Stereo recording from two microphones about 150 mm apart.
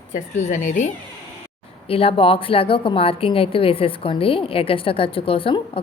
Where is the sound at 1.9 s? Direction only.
40° left (ahead or behind).